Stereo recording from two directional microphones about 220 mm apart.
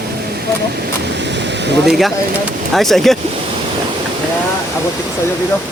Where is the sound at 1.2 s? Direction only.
50° right (ahead or behind).